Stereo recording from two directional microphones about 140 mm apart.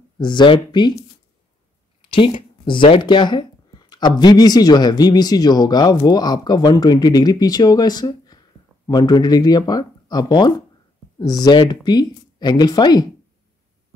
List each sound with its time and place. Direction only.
0.2 s speech: 35° left (ahead or behind)
2.0 s a sound: 35° left (ahead or behind)
2.6 s speech: 35° left (ahead or behind)